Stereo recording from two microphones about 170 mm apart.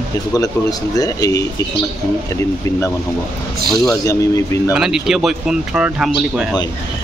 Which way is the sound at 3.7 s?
Centre (ahead or behind).